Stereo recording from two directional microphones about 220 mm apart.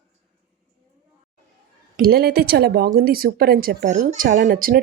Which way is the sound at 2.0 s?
45° right (ahead or behind).